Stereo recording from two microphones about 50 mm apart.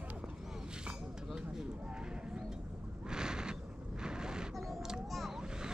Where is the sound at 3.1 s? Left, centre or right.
Centre.